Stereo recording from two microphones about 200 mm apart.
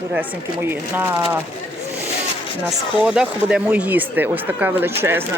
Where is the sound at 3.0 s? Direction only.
5° right (ahead or behind).